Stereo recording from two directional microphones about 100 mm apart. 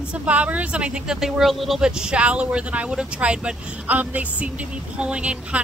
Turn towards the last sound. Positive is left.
turn(degrees=-10)  # may be behind; listen again after turning